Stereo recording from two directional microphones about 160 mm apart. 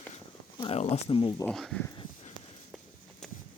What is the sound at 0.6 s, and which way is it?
Speech, 40° left (ahead or behind).